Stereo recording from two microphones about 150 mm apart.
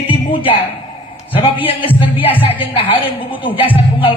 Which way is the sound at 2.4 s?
35° left (ahead or behind).